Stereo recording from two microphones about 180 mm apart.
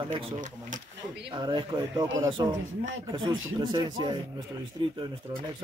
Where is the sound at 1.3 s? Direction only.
25° right (ahead or behind).